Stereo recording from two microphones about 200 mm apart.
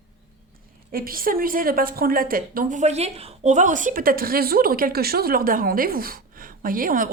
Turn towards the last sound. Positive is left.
turn(degrees=-45)  # may be behind; listen again after turning